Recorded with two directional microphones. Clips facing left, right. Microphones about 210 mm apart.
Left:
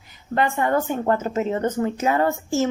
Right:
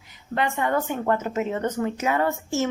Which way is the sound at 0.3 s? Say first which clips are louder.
Left 3 dB; 40° left (ahead or behind).